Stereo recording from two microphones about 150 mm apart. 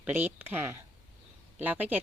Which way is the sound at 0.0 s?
15° right (ahead or behind).